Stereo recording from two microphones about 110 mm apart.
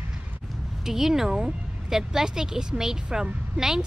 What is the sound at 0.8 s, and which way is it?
Speech, 5° right (ahead or behind).